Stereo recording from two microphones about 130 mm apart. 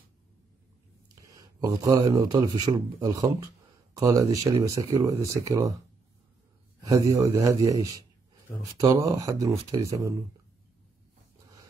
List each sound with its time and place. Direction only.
1.2 s speech: 25° right (ahead or behind)
6.8 s a man's voice: 25° right (ahead or behind)